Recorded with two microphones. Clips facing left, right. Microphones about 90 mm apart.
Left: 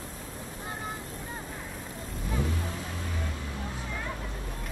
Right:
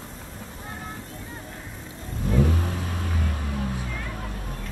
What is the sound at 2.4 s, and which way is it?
Music, 60° right (ahead or behind).